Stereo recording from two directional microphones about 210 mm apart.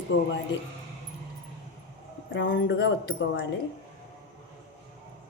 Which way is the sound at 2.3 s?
60° left (ahead or behind).